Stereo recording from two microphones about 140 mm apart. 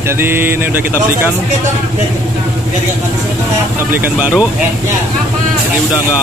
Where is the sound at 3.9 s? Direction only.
10° right (ahead or behind).